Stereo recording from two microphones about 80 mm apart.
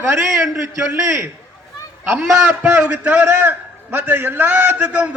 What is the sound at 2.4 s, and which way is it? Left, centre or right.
A man's voice, centre.